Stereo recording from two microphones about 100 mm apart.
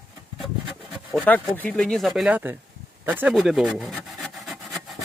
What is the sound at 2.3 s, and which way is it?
Speech, 15° right (ahead or behind).